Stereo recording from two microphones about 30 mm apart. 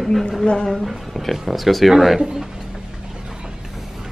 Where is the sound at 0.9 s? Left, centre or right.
Centre.